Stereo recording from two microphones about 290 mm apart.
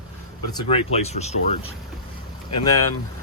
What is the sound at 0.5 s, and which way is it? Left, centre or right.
Speech, left.